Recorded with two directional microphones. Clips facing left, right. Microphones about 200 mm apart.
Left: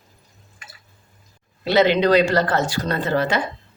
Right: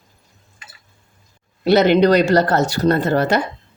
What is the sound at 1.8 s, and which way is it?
Speech, 40° right (ahead or behind).